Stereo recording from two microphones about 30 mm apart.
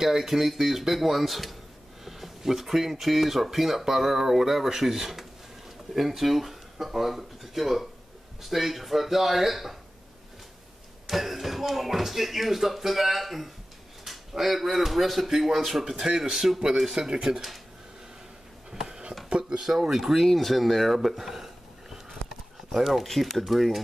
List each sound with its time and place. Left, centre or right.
0.0 s a man's voice: centre
11.1 s speech: centre
14.0 s a sound: centre
14.9 s a man's voice: centre
16.9 s speech: right
18.9 s a sound: right
19.2 s speech: right
19.6 s a man's voice: centre
22.7 s speech: centre